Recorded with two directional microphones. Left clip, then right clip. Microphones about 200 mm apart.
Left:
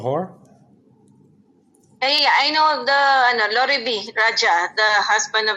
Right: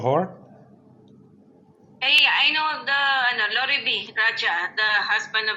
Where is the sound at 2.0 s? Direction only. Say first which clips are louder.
Left 1 dB; 45° left (ahead or behind).